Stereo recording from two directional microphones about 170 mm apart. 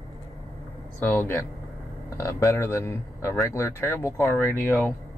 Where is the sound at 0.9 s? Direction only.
15° left (ahead or behind).